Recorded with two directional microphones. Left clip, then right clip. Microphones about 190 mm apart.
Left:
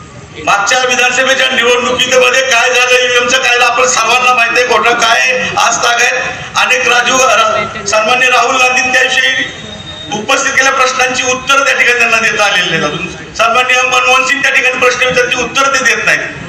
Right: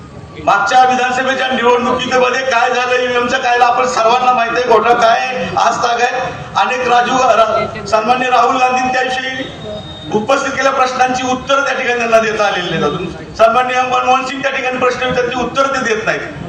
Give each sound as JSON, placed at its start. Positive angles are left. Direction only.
{"t": 0.4, "sound": "a man's voice", "side_deg": -45}
{"t": 10.2, "sound": "a man's voice", "side_deg": -45}
{"t": 13.5, "sound": "a man's voice", "side_deg": -45}